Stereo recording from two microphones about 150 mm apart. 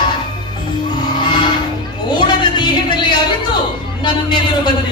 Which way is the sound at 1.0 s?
30° left (ahead or behind).